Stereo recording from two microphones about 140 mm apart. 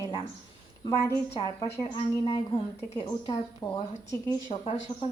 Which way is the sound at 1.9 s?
45° left (ahead or behind).